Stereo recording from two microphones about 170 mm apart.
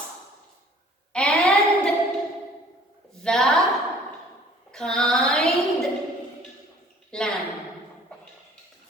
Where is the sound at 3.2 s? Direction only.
5° left (ahead or behind).